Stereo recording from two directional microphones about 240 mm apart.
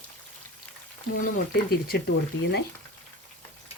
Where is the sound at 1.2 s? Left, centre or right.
Left.